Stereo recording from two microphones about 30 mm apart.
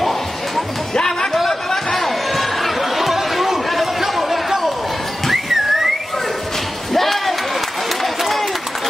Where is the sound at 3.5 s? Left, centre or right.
Centre.